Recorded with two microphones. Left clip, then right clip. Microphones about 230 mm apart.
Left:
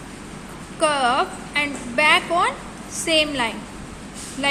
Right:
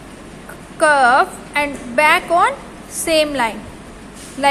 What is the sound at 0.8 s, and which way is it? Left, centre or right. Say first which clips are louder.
A woman's voice: right 7 dB; centre.